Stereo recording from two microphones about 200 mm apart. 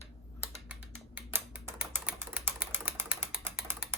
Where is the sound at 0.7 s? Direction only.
5° right (ahead or behind).